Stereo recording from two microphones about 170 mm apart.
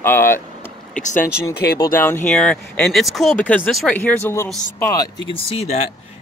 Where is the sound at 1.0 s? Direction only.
50° left (ahead or behind).